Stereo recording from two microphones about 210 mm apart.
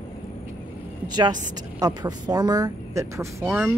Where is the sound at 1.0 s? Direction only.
20° right (ahead or behind).